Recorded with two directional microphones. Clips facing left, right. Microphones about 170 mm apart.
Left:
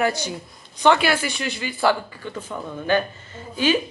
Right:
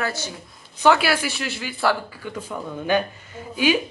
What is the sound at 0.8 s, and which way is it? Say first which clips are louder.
Speech: even; 5° right (ahead or behind).